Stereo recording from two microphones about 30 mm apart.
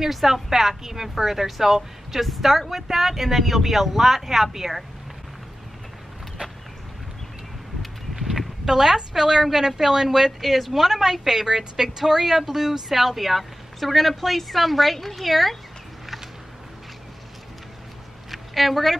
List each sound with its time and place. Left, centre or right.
0.0 s speech: centre
8.6 s speech: centre
10.4 s speech: centre
18.3 s a sound: centre